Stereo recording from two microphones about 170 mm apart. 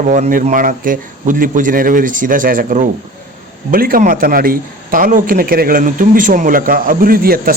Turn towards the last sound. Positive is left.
turn(degrees=-60)  # may be behind; listen again after turning